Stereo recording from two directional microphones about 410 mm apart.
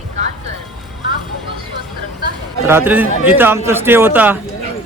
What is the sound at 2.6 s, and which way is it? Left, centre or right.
A man's voice, centre.